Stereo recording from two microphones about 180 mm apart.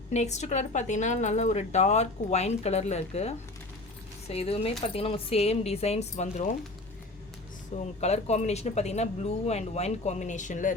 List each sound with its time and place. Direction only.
0.1 s speech: 40° left (ahead or behind)
7.8 s speech: 35° left (ahead or behind)